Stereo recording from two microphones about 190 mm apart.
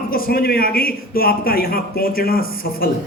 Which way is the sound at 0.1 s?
50° left (ahead or behind).